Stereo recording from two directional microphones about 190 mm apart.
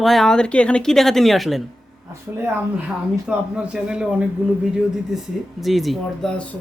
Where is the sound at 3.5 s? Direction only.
5° right (ahead or behind).